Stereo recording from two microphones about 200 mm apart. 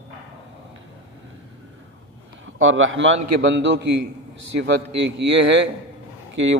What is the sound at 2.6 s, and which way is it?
A man's voice, 80° right.